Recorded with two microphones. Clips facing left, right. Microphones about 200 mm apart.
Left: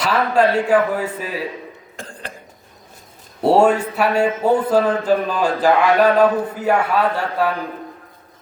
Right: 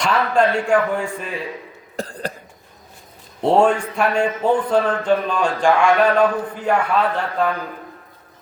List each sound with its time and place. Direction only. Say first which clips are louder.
0.0 s a man's voice: left 1 dB; 5° left (ahead or behind)
2.0 s cough: right 8 dB; 35° right (ahead or behind)
3.4 s a man's voice: left 2 dB; 10° left (ahead or behind)